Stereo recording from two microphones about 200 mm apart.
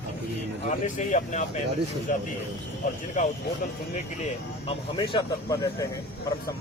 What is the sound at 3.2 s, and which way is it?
Speech, 40° left (ahead or behind).